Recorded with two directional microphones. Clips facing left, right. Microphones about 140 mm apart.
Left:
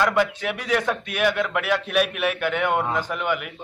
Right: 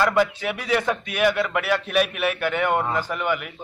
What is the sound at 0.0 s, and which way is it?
A man's voice, 5° right (ahead or behind).